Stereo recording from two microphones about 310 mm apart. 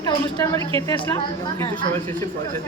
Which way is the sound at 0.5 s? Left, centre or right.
Centre.